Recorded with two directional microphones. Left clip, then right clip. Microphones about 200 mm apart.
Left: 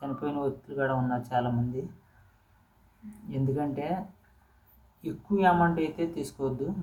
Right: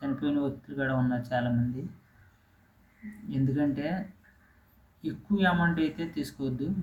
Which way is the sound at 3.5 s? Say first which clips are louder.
Right 2 dB; centre (ahead or behind).